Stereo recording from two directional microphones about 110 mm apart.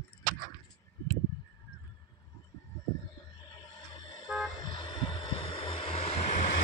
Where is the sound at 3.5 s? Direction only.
45° left (ahead or behind).